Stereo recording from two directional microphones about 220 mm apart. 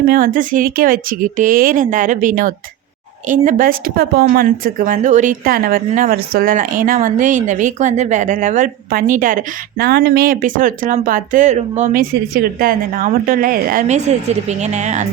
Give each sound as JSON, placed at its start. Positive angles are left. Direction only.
{"t": 0.1, "sound": "speech", "side_deg": -40}